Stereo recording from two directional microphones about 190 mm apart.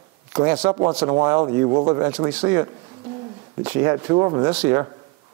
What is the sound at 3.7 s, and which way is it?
Speech, 20° right (ahead or behind).